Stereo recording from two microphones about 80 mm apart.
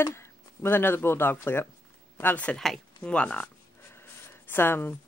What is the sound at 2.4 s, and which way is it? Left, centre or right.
Speech, centre.